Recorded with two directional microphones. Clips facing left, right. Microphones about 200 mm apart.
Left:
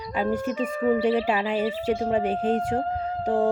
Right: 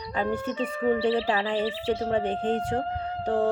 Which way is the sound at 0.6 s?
45° left (ahead or behind).